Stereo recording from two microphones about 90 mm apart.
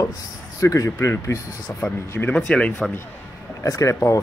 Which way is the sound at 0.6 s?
35° left (ahead or behind).